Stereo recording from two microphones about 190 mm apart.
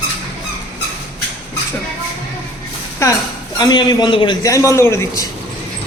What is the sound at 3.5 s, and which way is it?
A man's voice, 20° left (ahead or behind).